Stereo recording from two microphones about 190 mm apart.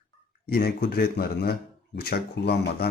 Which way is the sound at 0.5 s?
55° left (ahead or behind).